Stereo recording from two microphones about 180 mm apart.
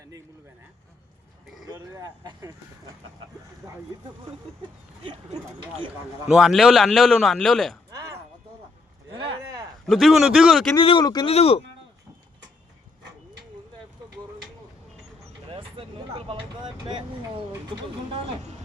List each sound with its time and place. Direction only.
1.6 s speech: 20° right (ahead or behind)
6.2 s a man's voice: 5° right (ahead or behind)
9.4 s a sound: 15° right (ahead or behind)
9.8 s a man's voice: centre (ahead or behind)
10.8 s speech: 25° left (ahead or behind)
15.4 s speech: 30° right (ahead or behind)